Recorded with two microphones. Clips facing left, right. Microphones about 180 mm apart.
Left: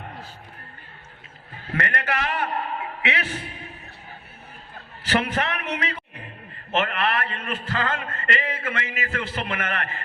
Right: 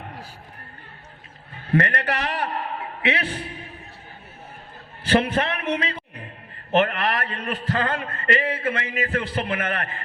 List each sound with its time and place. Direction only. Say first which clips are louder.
1.7 s a man's voice: right 5 dB; 35° right (ahead or behind)
5.0 s a man's voice: right 4 dB; 30° right (ahead or behind)